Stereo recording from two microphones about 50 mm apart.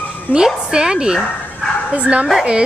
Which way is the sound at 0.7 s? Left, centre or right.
Centre.